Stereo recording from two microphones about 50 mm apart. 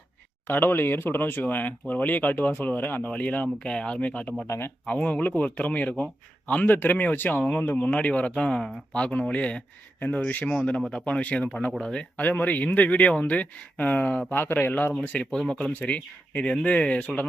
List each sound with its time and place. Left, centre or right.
0.4 s speech: left
3.1 s speech: left
4.0 s speech: left
4.4 s speech: left
4.9 s speech: left
8.4 s speech: centre
8.9 s speech: left
10.5 s speech: centre
11.0 s speech: left
12.1 s speech: left
15.1 s speech: left